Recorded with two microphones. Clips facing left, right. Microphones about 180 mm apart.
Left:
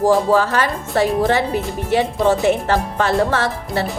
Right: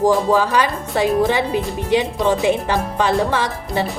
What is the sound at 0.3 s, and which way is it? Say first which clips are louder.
Speech: even; 15° right (ahead or behind).